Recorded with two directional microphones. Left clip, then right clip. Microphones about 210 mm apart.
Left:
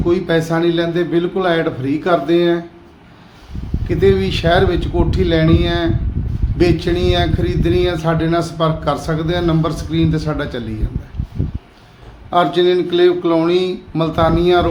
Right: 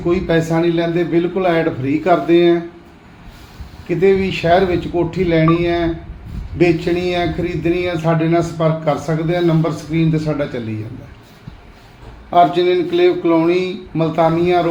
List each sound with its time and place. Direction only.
0.1 s speech: 10° left (ahead or behind)
3.8 s speech: 10° left (ahead or behind)
12.3 s speech: 15° left (ahead or behind)